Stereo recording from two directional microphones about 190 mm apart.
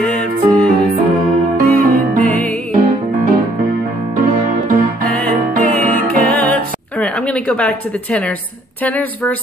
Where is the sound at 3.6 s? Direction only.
55° right (ahead or behind).